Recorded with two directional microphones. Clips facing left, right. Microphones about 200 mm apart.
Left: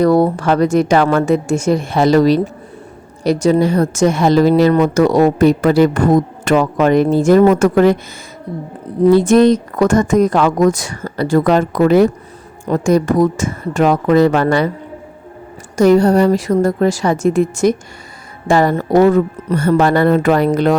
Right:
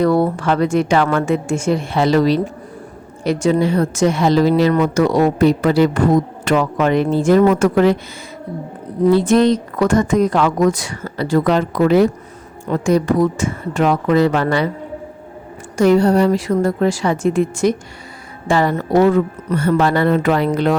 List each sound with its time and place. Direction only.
0.0 s a woman's voice: 40° left (ahead or behind)
9.0 s a woman's voice: 45° left (ahead or behind)
15.7 s a woman's voice: 40° left (ahead or behind)